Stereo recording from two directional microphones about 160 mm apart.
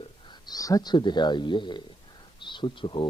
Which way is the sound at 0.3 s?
25° left (ahead or behind).